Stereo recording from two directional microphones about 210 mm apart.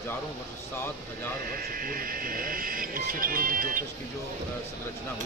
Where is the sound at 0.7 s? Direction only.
10° left (ahead or behind).